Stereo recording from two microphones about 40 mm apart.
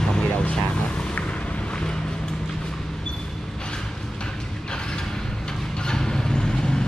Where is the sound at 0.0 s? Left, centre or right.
Left.